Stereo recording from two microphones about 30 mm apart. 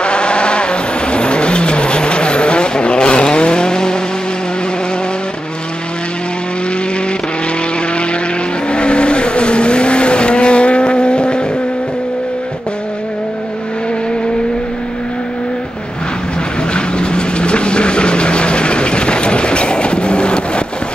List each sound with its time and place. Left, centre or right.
0.0 s vehicle: left
8.6 s vehicle: left
16.7 s vehicle: left